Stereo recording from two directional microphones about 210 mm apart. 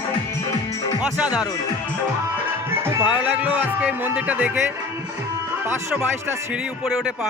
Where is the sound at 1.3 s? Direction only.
20° left (ahead or behind).